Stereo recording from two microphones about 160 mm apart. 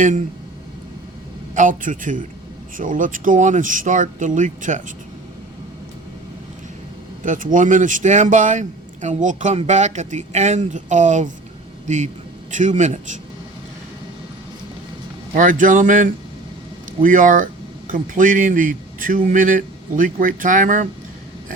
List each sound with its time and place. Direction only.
1.5 s a man's voice: 55° right (ahead or behind)
7.2 s a man's voice: 55° right (ahead or behind)
15.4 s a man's voice: 55° right (ahead or behind)